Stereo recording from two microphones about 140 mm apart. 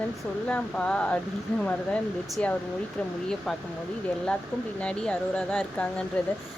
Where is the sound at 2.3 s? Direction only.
10° left (ahead or behind).